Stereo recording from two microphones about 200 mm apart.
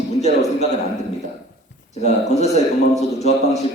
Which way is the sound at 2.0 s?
35° left (ahead or behind).